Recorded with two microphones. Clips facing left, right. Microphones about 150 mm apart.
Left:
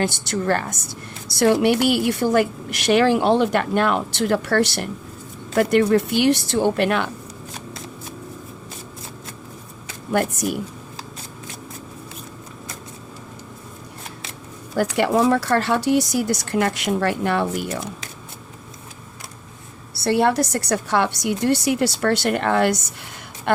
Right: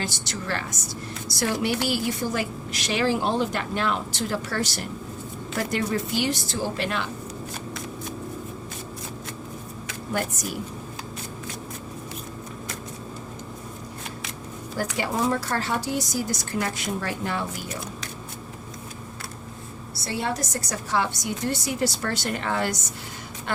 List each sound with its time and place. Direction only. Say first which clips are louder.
0.0 s a woman's voice: left 9 dB; 55° left (ahead or behind)
1.3 s a woman's voice: left 9 dB; 60° left (ahead or behind)
10.1 s a woman's voice: left 8 dB; 60° left (ahead or behind)
14.9 s a woman's voice: left 8 dB; 65° left (ahead or behind)
19.9 s a woman's voice: left 10 dB; 65° left (ahead or behind)